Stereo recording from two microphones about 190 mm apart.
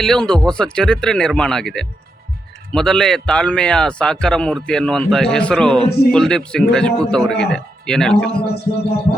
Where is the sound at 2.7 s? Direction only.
5° left (ahead or behind).